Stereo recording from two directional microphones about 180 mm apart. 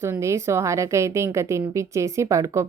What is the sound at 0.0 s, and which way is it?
A woman's voice, 15° right (ahead or behind).